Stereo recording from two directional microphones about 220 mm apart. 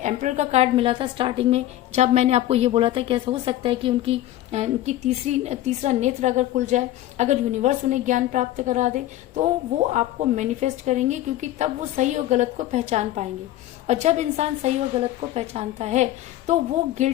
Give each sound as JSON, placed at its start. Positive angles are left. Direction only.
{"t": 0.0, "sound": "a woman's voice", "side_deg": -30}